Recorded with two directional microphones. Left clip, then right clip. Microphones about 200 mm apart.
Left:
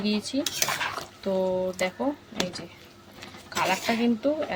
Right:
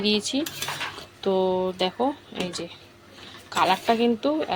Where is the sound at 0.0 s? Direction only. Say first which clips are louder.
Right 4 dB; 15° right (ahead or behind).